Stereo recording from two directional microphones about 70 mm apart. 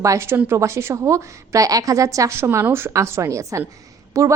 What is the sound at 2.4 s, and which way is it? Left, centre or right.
A woman's voice, right.